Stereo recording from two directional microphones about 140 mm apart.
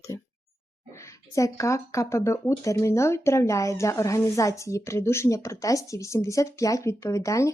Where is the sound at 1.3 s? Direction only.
20° left (ahead or behind).